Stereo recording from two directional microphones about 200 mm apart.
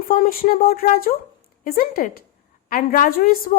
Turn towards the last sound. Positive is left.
turn(degrees=45)  # may be behind; listen again after turning